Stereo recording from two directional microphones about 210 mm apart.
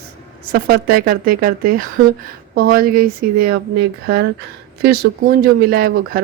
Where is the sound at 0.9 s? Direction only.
45° right (ahead or behind).